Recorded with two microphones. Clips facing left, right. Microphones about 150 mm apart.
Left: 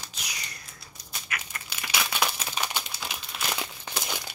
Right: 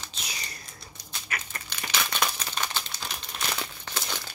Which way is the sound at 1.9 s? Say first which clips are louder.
Left 1 dB; 10° left (ahead or behind).